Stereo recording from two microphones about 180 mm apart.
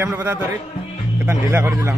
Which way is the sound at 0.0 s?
10° right (ahead or behind).